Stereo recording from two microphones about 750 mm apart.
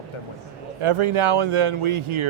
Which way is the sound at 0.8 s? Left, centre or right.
Right.